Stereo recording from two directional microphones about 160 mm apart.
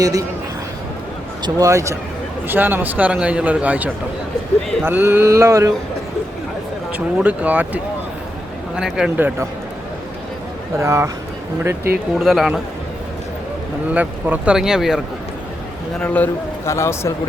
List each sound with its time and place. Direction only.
0.0 s speech: 20° right (ahead or behind)
1.4 s a man's voice: 25° right (ahead or behind)
6.9 s a man's voice: 10° right (ahead or behind)
10.8 s a man's voice: 20° right (ahead or behind)
12.2 s speech: centre (ahead or behind)
13.9 s speech: 10° right (ahead or behind)
16.0 s a man's voice: 10° left (ahead or behind)